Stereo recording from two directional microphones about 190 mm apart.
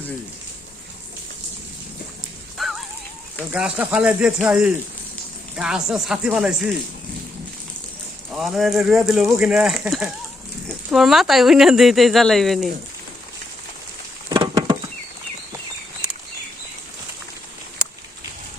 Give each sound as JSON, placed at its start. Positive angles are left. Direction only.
{"t": 2.6, "sound": "music", "side_deg": 0}
{"t": 3.5, "sound": "speech", "side_deg": -5}
{"t": 8.3, "sound": "speech", "side_deg": 0}
{"t": 14.3, "sound": "patter", "side_deg": -20}